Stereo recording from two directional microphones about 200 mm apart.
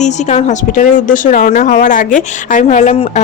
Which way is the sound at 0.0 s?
35° left (ahead or behind).